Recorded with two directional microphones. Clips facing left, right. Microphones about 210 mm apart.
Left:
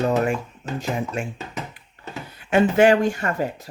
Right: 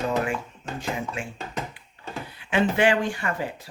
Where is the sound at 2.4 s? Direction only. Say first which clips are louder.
Left 6 dB; 45° left (ahead or behind).